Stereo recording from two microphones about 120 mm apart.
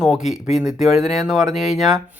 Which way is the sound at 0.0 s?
5° right (ahead or behind).